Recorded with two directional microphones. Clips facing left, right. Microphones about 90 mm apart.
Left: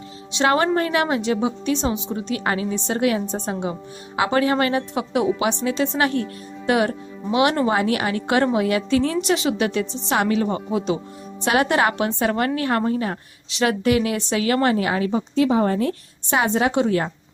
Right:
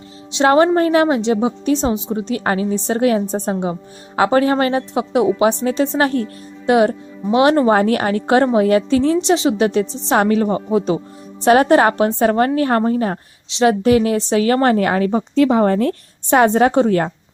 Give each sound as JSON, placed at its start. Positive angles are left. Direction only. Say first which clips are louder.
{"t": 0.3, "sound": "a woman's voice", "louder": "right 6 dB", "side_deg": -30}